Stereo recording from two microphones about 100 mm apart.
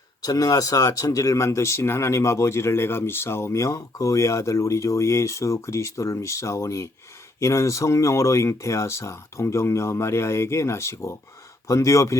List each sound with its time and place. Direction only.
0.2 s speech: 35° left (ahead or behind)